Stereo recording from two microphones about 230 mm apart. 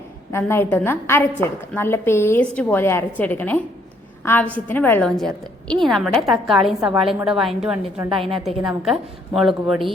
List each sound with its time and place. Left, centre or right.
0.3 s a woman's voice: centre
8.1 s a woman's voice: right
8.8 s a woman's voice: centre